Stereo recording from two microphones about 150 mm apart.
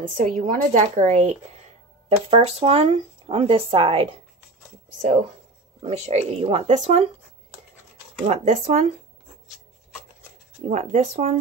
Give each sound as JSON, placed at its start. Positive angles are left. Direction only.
{"t": 0.1, "sound": "a woman's voice", "side_deg": -60}
{"t": 5.8, "sound": "speech", "side_deg": -45}
{"t": 8.3, "sound": "speech", "side_deg": -50}
{"t": 10.7, "sound": "speech", "side_deg": -50}